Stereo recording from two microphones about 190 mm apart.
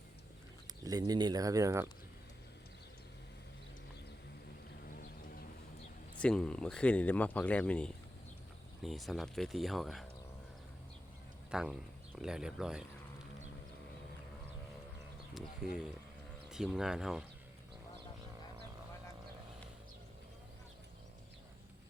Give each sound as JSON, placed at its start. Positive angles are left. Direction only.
{"t": 0.9, "sound": "speech", "side_deg": -20}
{"t": 4.9, "sound": "a sound", "side_deg": 45}
{"t": 6.1, "sound": "speech", "side_deg": 5}
{"t": 11.5, "sound": "speech", "side_deg": -5}
{"t": 15.4, "sound": "speech", "side_deg": -5}